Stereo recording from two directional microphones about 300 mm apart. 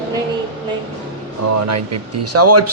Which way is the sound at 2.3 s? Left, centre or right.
Right.